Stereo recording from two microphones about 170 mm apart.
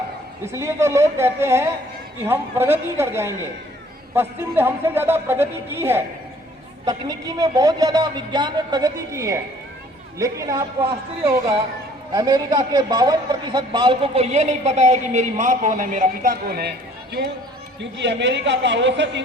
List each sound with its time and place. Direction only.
0.4 s a man's voice: 15° right (ahead or behind)
12.1 s a man's voice: 25° right (ahead or behind); by 17.2 s 70° right (ahead or behind)
17.7 s a woman's voice: 90° right